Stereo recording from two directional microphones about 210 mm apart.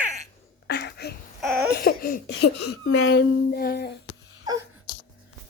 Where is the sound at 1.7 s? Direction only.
45° left (ahead or behind).